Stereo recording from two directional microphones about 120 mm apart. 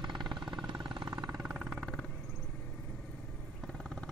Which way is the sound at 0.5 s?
40° right (ahead or behind).